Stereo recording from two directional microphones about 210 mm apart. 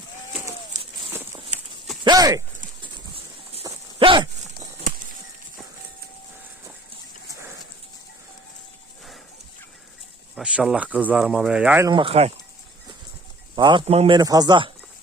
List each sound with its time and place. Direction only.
2.0 s a sound: 15° right (ahead or behind)
3.6 s dog: 20° right (ahead or behind)
10.3 s speech: 5° right (ahead or behind)
11.9 s speech: 25° right (ahead or behind)
13.6 s speech: 20° right (ahead or behind)